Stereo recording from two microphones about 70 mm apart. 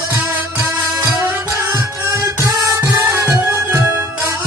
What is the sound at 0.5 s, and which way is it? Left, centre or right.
Music, right.